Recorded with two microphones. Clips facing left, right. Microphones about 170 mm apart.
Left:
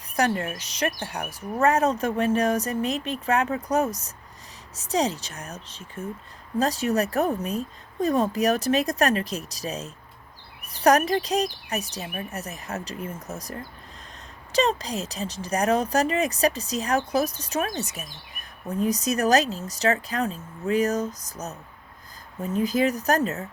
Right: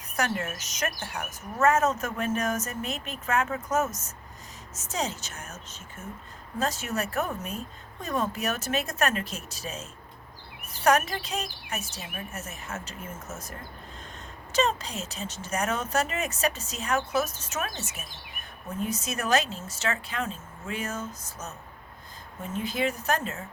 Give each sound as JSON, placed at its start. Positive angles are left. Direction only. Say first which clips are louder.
{"t": 0.2, "sound": "speech", "louder": "left 5 dB", "side_deg": 30}